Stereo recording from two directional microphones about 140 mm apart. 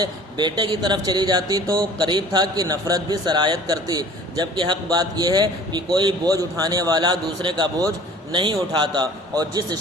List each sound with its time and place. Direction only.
0.0 s speech: 30° right (ahead or behind)